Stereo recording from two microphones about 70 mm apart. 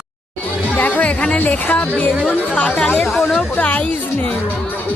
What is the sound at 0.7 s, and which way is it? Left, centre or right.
Music, left.